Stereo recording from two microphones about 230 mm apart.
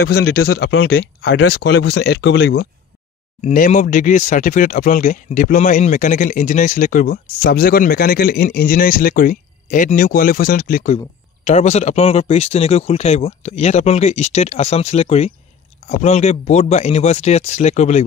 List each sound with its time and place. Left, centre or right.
0.1 s speech: left
3.3 s speech: left